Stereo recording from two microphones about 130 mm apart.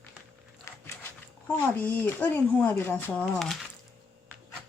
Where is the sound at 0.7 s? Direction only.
20° left (ahead or behind).